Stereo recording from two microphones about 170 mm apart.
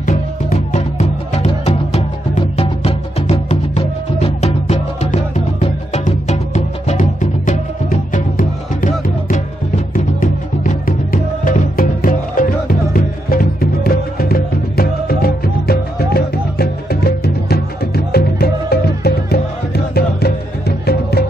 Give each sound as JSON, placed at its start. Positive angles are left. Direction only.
{"t": 0.0, "sound": "music", "side_deg": 50}